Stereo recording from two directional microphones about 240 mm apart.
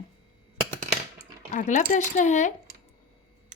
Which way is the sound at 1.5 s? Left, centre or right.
Left.